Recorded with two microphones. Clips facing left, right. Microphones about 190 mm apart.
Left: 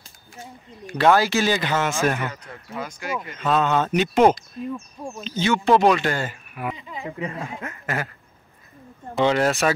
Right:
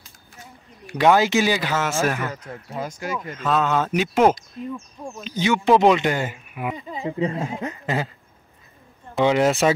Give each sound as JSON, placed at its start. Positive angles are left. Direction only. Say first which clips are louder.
{"t": 0.8, "sound": "speech", "louder": "right 1 dB", "side_deg": -15}
{"t": 2.8, "sound": "speech", "louder": "right 3 dB", "side_deg": -40}
{"t": 3.3, "sound": "speech", "louder": "left 1 dB", "side_deg": 0}
{"t": 4.7, "sound": "speech", "louder": "left 1 dB", "side_deg": 10}
{"t": 5.2, "sound": "speech", "louder": "right 1 dB", "side_deg": -15}
{"t": 9.2, "sound": "speech", "louder": "right 2 dB", "side_deg": -15}